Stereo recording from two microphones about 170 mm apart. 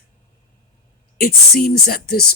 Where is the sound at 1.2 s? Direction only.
60° left (ahead or behind).